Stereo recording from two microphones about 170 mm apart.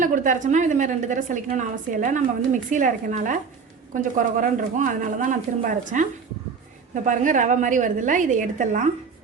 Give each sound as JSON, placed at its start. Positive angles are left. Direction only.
{"t": 0.0, "sound": "a woman's voice", "side_deg": -50}